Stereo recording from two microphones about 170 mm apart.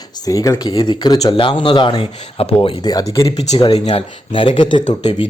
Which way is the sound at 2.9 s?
20° left (ahead or behind).